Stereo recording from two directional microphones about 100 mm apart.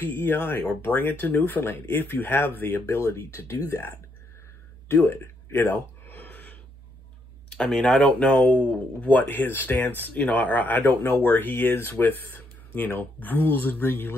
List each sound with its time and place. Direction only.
0.0 s speech: 20° left (ahead or behind)
4.8 s a sound: 25° left (ahead or behind)
7.5 s speech: 10° left (ahead or behind)